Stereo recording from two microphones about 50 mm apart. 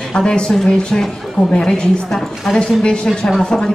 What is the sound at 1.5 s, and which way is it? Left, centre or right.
A woman's voice, centre.